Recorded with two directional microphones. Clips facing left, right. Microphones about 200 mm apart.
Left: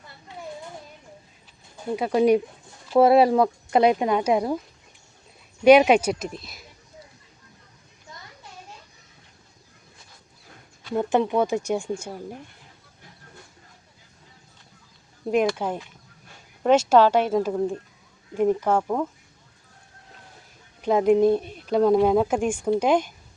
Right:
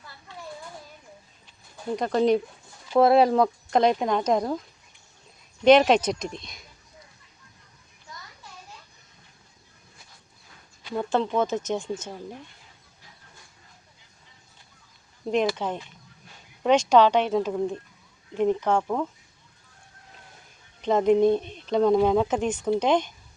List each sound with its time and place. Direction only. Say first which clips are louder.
0.0 s a sound: left 3 dB; 20° left (ahead or behind)
1.7 s speech: left 2 dB; 5° left (ahead or behind)
5.6 s speech: left 2 dB; 10° left (ahead or behind)
10.9 s speech: left 3 dB; 15° left (ahead or behind)
15.5 s speech: left 2 dB; 10° left (ahead or behind)
20.8 s speech: left 1 dB; 5° left (ahead or behind)